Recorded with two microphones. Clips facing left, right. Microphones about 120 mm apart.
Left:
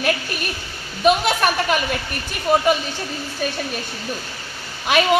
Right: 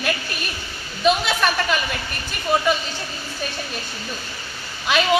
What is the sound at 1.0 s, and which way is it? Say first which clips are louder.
Speech: left 2 dB; 50° left (ahead or behind).